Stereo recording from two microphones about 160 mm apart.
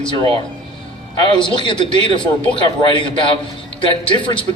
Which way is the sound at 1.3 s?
30° left (ahead or behind).